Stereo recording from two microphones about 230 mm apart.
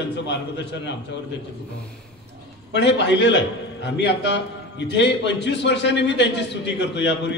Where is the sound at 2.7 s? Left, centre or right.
Left.